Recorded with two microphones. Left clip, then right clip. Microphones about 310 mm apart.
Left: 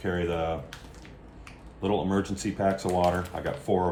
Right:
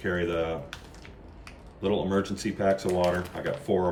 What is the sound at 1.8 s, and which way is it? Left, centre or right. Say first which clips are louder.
Speech: right 1 dB; centre.